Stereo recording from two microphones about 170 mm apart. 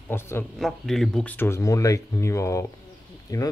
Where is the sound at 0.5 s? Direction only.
Centre (ahead or behind).